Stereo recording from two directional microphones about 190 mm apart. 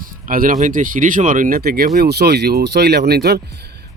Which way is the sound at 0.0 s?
50° right (ahead or behind).